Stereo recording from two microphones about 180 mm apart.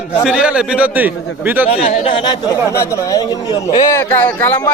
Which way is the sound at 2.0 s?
25° left (ahead or behind).